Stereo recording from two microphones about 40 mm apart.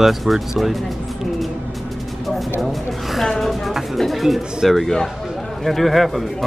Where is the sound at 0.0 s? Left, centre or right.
Centre.